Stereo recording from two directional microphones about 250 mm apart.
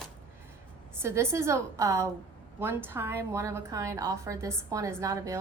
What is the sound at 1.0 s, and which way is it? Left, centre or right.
A woman's voice, centre.